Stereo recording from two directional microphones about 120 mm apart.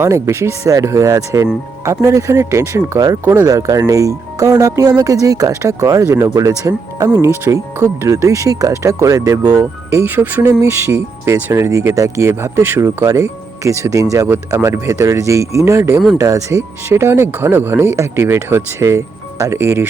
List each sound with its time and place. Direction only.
0.0 s speech: 20° right (ahead or behind)